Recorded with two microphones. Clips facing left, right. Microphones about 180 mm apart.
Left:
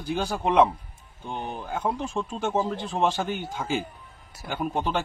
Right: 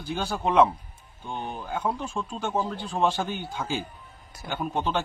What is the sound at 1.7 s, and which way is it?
Speech, centre (ahead or behind).